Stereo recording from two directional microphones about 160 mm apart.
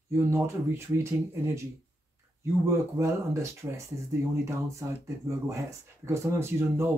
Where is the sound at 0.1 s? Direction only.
15° right (ahead or behind).